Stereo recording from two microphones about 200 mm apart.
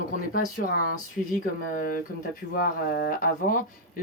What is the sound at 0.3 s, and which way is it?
Speech, 45° left (ahead or behind).